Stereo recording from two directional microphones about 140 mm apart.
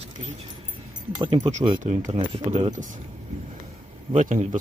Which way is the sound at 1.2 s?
35° right (ahead or behind).